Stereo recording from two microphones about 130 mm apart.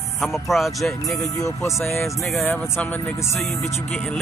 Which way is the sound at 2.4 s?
15° left (ahead or behind).